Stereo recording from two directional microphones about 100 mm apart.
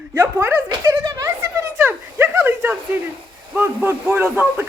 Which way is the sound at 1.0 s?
40° right (ahead or behind).